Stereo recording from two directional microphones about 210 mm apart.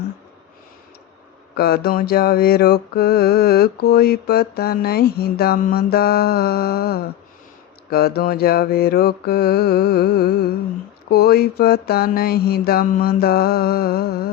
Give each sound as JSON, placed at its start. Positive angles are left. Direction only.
{"t": 1.5, "sound": "mantra", "side_deg": 50}